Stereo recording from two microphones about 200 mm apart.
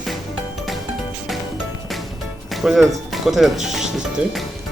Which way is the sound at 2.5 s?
Centre (ahead or behind).